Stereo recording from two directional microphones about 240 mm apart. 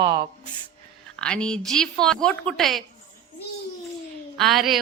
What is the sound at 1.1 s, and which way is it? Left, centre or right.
Speech, centre.